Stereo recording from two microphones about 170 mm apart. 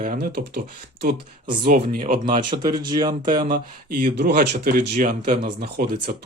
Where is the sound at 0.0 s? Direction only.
55° right (ahead or behind).